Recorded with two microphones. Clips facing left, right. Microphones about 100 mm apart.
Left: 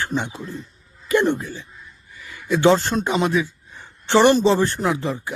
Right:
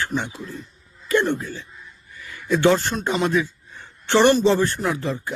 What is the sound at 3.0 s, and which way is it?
A man's voice, 10° left (ahead or behind).